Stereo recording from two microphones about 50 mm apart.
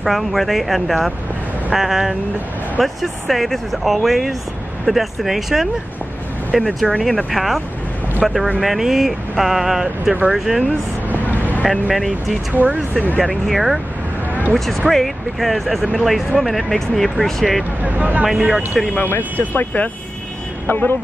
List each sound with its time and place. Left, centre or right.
0.0 s speech: centre
6.8 s speech: centre
11.2 s vehicle: left
11.9 s speech: centre
12.5 s speech: right
13.5 s speech: centre
14.9 s speech: centre
17.8 s speech: right
18.2 s speech: centre
19.0 s a man's voice: left